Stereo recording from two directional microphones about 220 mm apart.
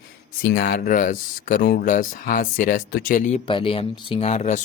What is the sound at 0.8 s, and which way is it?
Speech, 35° left (ahead or behind).